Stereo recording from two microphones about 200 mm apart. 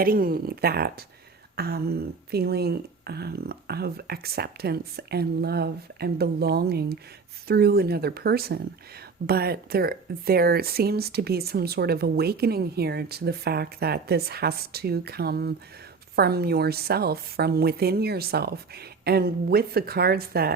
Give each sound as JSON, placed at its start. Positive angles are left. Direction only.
{"t": 0.0, "sound": "speech", "side_deg": -45}